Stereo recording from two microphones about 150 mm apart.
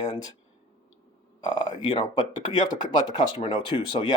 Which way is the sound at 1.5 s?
30° left (ahead or behind).